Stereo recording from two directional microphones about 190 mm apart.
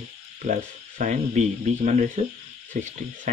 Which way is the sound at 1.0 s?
40° right (ahead or behind).